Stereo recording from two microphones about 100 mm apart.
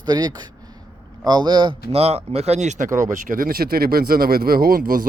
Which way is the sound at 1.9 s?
90° right.